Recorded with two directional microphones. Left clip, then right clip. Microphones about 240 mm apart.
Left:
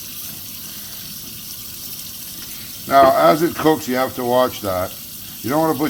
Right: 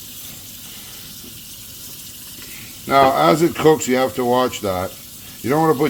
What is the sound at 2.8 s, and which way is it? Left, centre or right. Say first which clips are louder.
Speech: left 2 dB; right.